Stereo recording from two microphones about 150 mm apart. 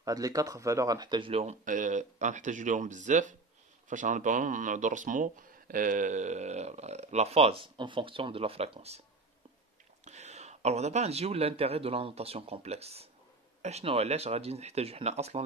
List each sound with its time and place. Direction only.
0.0 s speech: 25° right (ahead or behind); by 9.0 s 40° right (ahead or behind)
10.0 s a man's voice: 50° right (ahead or behind)